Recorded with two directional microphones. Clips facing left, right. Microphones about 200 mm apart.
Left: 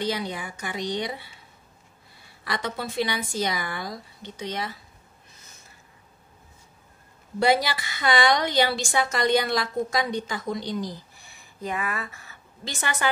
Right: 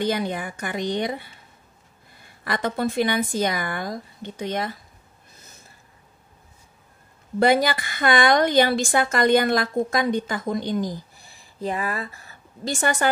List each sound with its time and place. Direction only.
0.0 s a woman's voice: 50° right (ahead or behind)
2.4 s a woman's voice: 50° right (ahead or behind)
7.3 s a woman's voice: 50° right (ahead or behind)
11.3 s a woman's voice: 35° right (ahead or behind)